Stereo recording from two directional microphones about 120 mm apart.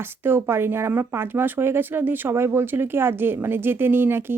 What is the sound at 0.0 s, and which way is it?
Speech, 20° right (ahead or behind).